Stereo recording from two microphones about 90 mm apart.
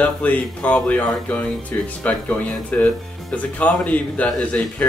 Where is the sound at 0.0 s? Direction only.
15° left (ahead or behind).